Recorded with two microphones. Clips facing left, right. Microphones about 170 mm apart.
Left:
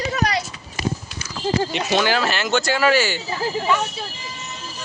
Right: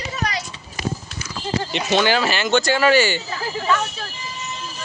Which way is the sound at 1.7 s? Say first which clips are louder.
Right 1 dB; centre (ahead or behind).